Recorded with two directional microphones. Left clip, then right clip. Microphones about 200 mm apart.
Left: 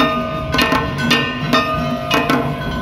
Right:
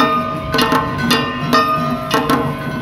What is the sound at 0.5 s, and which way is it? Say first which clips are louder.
Music: right 1 dB; 20° right (ahead or behind).